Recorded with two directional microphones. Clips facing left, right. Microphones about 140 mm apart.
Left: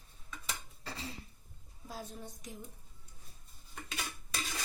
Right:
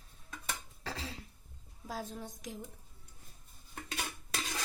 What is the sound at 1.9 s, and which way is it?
Speech, 90° right.